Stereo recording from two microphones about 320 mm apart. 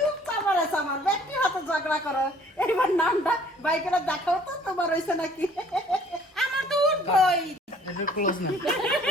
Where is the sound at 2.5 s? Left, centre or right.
Centre.